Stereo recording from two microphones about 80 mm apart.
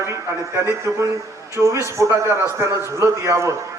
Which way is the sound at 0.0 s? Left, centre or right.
Right.